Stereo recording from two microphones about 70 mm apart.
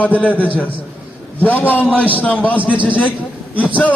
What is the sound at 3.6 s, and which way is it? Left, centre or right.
Speech, left.